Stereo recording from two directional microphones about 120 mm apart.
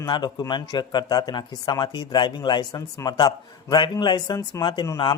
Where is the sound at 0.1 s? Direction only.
40° left (ahead or behind).